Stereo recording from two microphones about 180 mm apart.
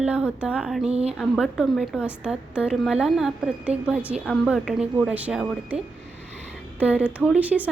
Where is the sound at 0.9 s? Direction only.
35° right (ahead or behind).